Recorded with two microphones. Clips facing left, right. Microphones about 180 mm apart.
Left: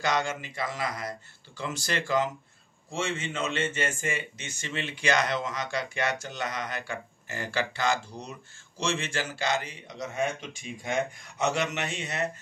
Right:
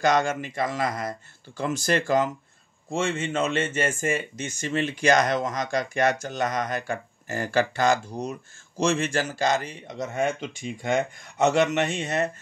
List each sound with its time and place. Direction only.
0.0 s speech: 45° right (ahead or behind)